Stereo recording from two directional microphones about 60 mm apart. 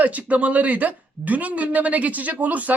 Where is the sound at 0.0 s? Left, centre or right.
Right.